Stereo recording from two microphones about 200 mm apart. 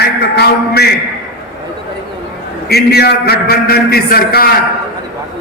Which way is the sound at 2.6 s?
55° left (ahead or behind).